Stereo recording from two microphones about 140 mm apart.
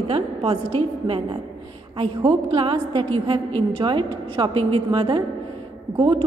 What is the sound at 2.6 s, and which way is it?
A woman's voice, 35° right (ahead or behind).